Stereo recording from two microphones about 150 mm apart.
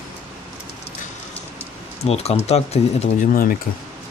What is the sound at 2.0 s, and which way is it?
Speech, 45° left (ahead or behind).